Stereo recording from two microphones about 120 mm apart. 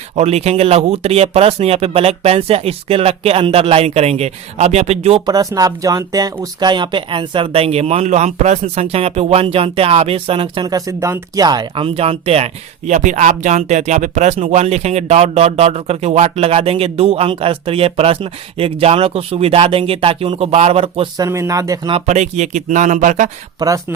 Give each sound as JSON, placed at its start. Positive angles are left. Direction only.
{"t": 0.2, "sound": "speech", "side_deg": -60}
{"t": 5.2, "sound": "speech", "side_deg": -30}
{"t": 10.7, "sound": "speech", "side_deg": -30}
{"t": 11.8, "sound": "speech", "side_deg": -55}
{"t": 12.9, "sound": "speech", "side_deg": -80}
{"t": 21.2, "sound": "speech", "side_deg": -25}
{"t": 22.0, "sound": "speech", "side_deg": -70}
{"t": 23.6, "sound": "speech", "side_deg": -30}